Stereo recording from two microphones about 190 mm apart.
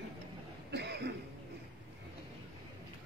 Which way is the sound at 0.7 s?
60° right (ahead or behind).